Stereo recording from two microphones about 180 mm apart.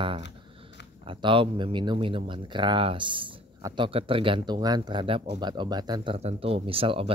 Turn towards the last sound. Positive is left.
turn(degrees=-30)  # may be behind; listen again after turning